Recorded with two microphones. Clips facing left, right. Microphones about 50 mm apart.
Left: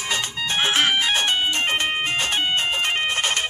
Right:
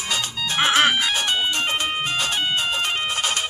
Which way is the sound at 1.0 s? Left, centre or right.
Left.